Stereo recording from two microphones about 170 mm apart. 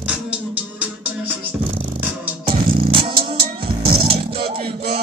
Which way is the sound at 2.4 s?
30° right (ahead or behind).